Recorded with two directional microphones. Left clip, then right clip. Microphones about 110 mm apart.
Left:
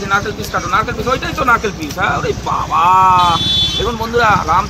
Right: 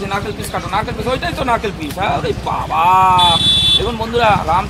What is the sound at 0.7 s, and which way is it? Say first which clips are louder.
Speech: left 3 dB; 15° right (ahead or behind).